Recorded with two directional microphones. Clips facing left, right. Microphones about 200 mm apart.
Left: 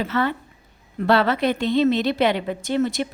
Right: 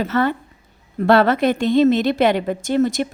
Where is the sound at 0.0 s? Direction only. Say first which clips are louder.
Right 4 dB; 45° right (ahead or behind).